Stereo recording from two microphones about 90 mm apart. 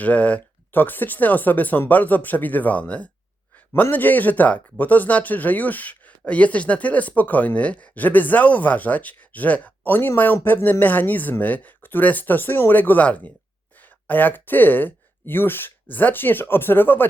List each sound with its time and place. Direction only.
0.0 s speech: 15° left (ahead or behind)